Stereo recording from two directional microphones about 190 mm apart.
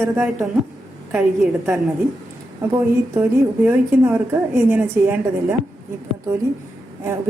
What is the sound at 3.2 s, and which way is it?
A woman's voice, 10° right (ahead or behind).